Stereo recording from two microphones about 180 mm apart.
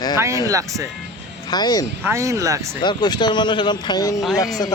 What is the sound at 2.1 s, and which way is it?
Speech, 15° right (ahead or behind).